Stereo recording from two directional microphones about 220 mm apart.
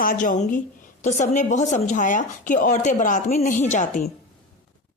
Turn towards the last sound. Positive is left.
turn(degrees=35)  # may be behind; listen again after turning